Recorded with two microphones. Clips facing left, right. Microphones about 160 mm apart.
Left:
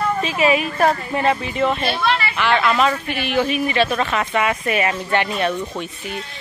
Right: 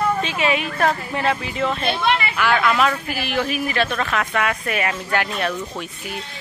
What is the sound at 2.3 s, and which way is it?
Speech, centre (ahead or behind).